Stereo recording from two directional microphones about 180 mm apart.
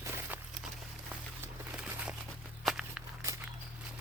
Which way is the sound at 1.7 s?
10° right (ahead or behind).